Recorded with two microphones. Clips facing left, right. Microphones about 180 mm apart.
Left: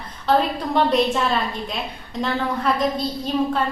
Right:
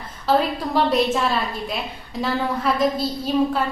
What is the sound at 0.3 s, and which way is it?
A woman's voice, centre (ahead or behind).